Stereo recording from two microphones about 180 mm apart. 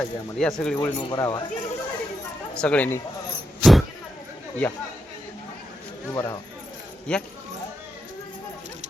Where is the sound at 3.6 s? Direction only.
Centre (ahead or behind).